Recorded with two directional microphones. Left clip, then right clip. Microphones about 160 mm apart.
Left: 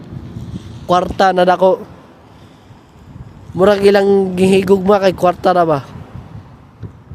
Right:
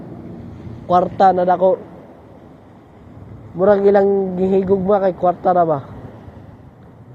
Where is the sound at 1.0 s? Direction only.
75° left (ahead or behind); by 1.7 s 60° left (ahead or behind).